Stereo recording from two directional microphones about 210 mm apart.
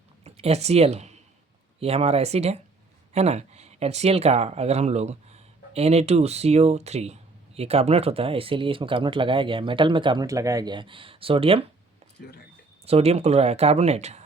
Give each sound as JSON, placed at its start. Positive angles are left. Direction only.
{"t": 0.3, "sound": "speech", "side_deg": -30}
{"t": 12.8, "sound": "speech", "side_deg": -30}